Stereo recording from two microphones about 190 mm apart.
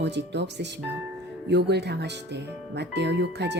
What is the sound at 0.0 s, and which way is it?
Speech, 65° right (ahead or behind).